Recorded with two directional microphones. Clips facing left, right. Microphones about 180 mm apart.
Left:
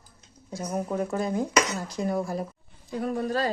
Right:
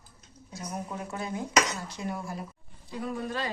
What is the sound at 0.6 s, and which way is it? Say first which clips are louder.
Speech: left 8 dB; 40° left (ahead or behind).